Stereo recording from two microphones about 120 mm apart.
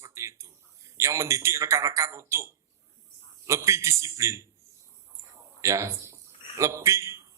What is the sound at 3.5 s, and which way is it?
Speech, 25° right (ahead or behind).